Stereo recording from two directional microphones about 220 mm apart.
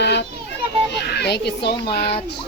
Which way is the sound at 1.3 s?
50° left (ahead or behind).